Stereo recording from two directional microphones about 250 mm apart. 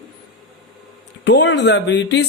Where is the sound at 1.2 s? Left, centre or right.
Left.